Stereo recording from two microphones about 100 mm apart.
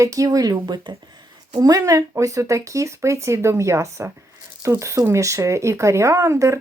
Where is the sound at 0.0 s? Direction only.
35° right (ahead or behind).